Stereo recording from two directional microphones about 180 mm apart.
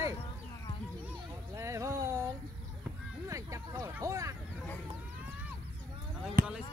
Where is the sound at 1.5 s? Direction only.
15° right (ahead or behind).